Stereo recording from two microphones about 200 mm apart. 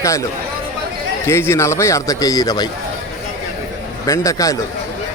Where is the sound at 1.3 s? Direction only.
15° left (ahead or behind).